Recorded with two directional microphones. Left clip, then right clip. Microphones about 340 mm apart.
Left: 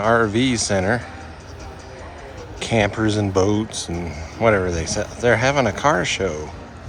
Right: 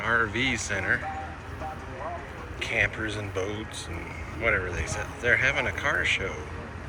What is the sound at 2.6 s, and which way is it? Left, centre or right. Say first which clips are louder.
Speech: left 7 dB; centre.